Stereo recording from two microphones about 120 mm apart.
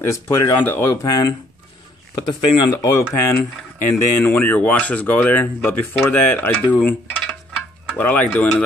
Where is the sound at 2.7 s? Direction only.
25° left (ahead or behind).